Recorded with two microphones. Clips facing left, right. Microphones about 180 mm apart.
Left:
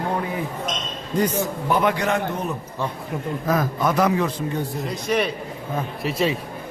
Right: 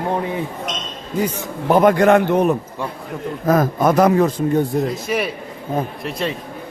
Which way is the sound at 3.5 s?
45° right (ahead or behind).